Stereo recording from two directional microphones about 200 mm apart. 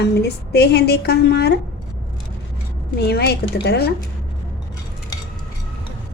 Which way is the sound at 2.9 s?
55° left (ahead or behind).